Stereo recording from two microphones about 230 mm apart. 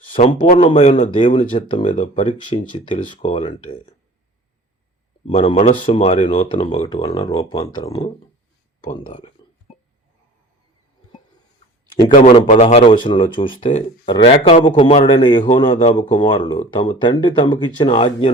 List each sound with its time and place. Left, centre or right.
0.1 s a man's voice: left
0.6 s speech: left
5.2 s speech: left
6.8 s speech: centre
9.4 s a sound: centre
12.0 s speech: left